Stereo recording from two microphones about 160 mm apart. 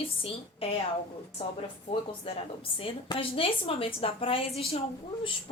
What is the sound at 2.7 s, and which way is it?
A woman's voice, 35° left (ahead or behind).